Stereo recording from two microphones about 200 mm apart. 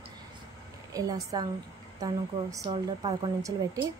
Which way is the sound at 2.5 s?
20° right (ahead or behind).